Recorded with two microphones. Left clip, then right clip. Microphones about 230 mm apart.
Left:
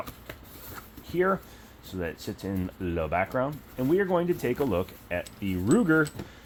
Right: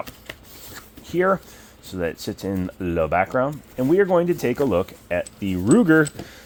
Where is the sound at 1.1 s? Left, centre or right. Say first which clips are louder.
Right 6 dB; right.